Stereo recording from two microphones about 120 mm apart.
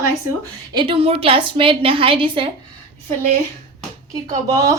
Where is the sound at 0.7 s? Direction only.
40° right (ahead or behind).